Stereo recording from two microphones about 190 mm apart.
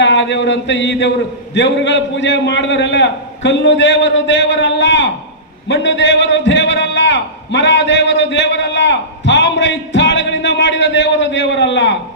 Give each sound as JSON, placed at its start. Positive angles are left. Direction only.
{"t": 0.0, "sound": "a man's voice", "side_deg": 70}